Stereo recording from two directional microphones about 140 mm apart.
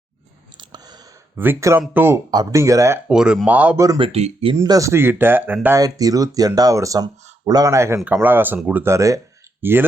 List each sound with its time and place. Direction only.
0.5 s a sound: 30° right (ahead or behind)
1.4 s speech: 15° right (ahead or behind)
2.3 s speech: 25° right (ahead or behind)
3.1 s speech: 5° right (ahead or behind)
3.8 s speech: 30° right (ahead or behind)
4.1 s speech: 45° right (ahead or behind)
4.6 s speech: 25° right (ahead or behind)